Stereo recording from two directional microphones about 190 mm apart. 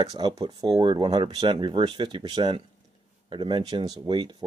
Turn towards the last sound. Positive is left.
turn(degrees=-25)  # may be behind; listen again after turning